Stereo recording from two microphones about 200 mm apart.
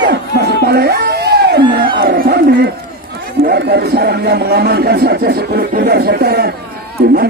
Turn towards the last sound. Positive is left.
turn(degrees=-50)  # may be behind; listen again after turning